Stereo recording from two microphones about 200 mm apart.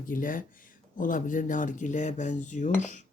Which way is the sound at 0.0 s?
45° left (ahead or behind).